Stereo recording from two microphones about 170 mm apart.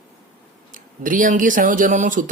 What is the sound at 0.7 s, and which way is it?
Speech, 50° right (ahead or behind).